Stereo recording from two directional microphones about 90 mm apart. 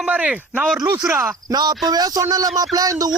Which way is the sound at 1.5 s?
50° right (ahead or behind).